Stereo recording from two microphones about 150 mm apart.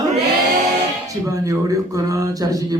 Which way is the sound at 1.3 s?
20° right (ahead or behind).